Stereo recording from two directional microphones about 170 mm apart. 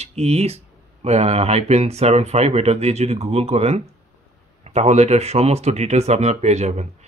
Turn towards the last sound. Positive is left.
turn(degrees=-40)  # may be behind; listen again after turning